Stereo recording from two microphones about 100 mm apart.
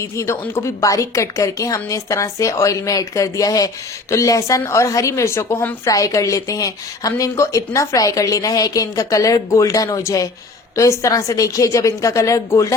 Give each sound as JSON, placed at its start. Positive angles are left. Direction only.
{"t": 0.0, "sound": "a woman's voice", "side_deg": 30}
{"t": 5.9, "sound": "a woman's voice", "side_deg": 35}